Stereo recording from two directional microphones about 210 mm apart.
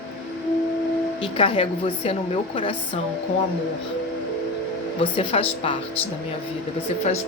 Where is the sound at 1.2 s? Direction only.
25° left (ahead or behind).